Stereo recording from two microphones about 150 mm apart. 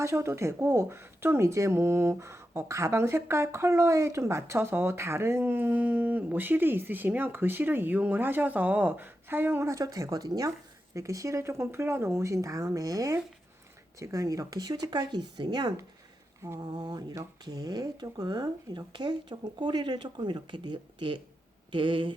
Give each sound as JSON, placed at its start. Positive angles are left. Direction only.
{"t": 0.0, "sound": "speech", "side_deg": -20}